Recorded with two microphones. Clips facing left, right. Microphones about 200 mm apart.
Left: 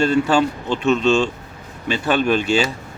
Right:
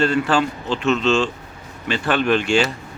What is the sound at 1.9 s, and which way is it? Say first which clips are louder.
Speech: left 1 dB; 10° left (ahead or behind).